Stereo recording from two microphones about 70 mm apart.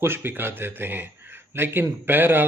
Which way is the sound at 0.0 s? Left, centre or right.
Right.